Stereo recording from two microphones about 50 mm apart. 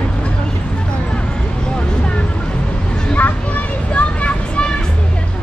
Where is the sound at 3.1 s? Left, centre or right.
Left.